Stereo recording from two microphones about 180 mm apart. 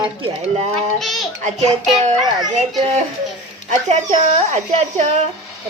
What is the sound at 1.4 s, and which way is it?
Speech, 40° right (ahead or behind).